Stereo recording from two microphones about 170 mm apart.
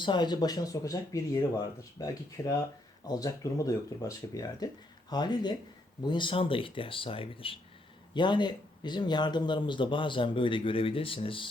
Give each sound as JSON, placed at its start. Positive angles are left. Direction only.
{"t": 0.0, "sound": "speech", "side_deg": 25}